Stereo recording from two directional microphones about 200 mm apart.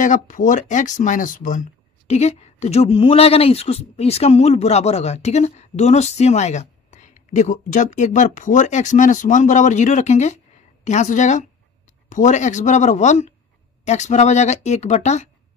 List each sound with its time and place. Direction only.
0.0 s speech: 40° left (ahead or behind)